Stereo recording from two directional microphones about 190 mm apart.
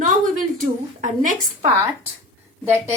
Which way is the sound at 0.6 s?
45° right (ahead or behind).